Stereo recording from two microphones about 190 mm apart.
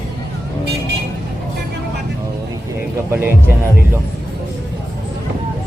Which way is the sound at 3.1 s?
10° right (ahead or behind).